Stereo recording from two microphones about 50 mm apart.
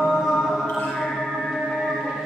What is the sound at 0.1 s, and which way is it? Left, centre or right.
Mantra, centre.